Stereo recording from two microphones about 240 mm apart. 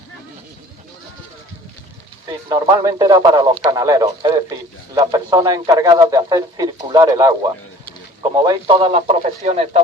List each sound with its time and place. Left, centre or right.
2.5 s speech: centre
8.4 s speech: centre